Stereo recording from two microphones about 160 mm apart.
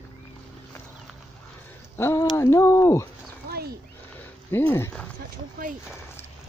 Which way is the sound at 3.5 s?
70° right (ahead or behind).